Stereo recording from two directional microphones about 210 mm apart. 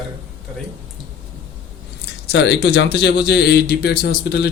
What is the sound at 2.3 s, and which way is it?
A man's voice, 55° left (ahead or behind).